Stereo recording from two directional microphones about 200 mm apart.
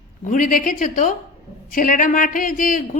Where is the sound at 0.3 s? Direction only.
40° left (ahead or behind).